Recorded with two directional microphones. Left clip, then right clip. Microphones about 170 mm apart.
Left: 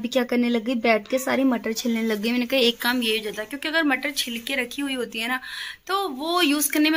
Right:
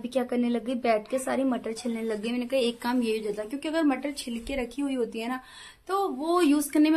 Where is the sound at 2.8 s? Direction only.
5° right (ahead or behind).